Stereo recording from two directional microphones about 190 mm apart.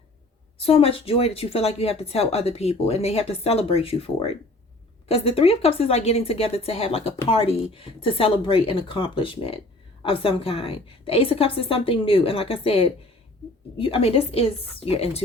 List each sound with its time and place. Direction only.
0.6 s a woman's voice: 30° left (ahead or behind)